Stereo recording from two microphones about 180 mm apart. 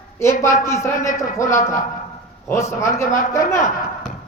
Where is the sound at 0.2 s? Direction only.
15° left (ahead or behind).